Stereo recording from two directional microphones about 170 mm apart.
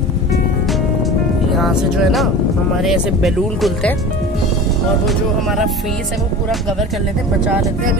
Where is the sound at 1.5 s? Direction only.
Centre (ahead or behind).